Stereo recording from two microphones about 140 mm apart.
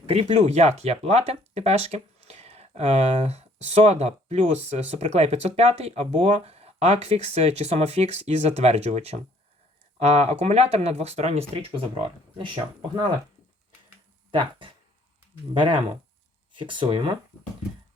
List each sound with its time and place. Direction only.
0.0 s speech: 45° right (ahead or behind)
14.3 s speech: 35° right (ahead or behind)
16.6 s speech: 35° right (ahead or behind)